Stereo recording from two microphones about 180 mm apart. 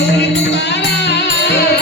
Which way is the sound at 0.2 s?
70° left (ahead or behind).